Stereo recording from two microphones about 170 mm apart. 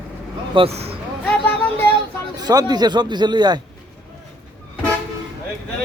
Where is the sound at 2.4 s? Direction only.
25° right (ahead or behind).